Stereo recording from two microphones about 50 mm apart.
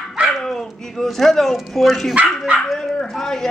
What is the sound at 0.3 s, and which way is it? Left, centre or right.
Speech, centre.